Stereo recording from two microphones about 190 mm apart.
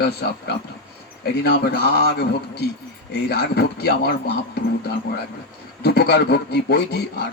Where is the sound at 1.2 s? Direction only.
60° left (ahead or behind).